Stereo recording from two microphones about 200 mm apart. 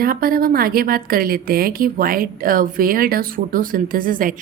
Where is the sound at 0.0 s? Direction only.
45° right (ahead or behind).